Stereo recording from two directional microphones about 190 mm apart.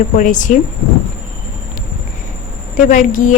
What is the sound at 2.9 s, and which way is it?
Speech, 45° left (ahead or behind).